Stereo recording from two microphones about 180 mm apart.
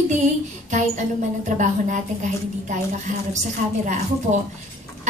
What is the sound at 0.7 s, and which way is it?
A woman's voice, 40° right (ahead or behind).